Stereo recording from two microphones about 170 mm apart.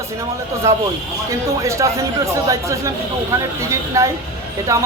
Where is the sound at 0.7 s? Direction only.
15° right (ahead or behind).